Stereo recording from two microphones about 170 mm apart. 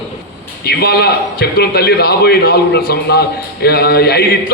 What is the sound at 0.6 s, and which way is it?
A man's voice, 70° left (ahead or behind).